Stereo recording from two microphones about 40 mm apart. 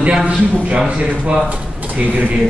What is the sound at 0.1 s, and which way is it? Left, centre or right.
Speech, right.